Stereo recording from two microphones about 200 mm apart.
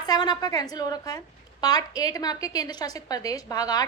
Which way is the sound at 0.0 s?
20° left (ahead or behind).